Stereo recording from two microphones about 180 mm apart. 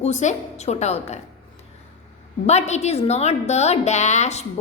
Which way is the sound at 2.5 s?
40° left (ahead or behind).